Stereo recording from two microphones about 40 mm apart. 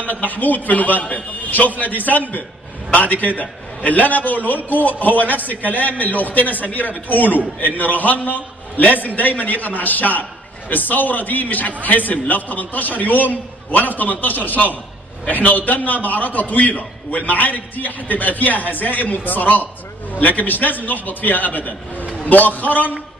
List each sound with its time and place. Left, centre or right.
0.0 s a man's voice: left